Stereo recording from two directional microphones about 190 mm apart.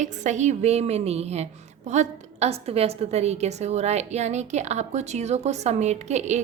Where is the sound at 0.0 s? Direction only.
40° right (ahead or behind).